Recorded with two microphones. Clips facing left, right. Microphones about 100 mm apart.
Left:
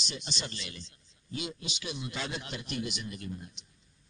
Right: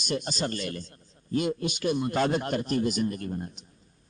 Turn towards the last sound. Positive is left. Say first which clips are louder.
# right 7 dB
turn(degrees=-50)  # may be behind; listen again after turning